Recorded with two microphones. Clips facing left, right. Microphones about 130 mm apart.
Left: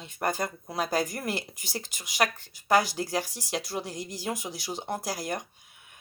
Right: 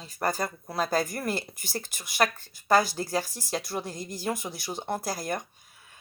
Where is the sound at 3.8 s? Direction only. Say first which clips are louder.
Right 1 dB; 15° left (ahead or behind).